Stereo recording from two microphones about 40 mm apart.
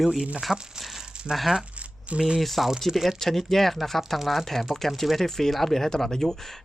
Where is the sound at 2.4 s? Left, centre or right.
Centre.